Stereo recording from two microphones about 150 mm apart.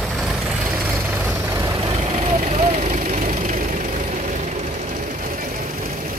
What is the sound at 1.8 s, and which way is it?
Vehicle, 45° right (ahead or behind).